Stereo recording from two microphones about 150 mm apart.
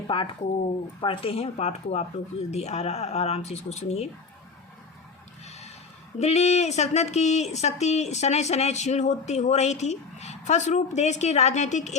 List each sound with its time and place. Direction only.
0.1 s speech: 35° left (ahead or behind)
5.5 s a sound: 45° left (ahead or behind)
6.1 s speech: 45° left (ahead or behind)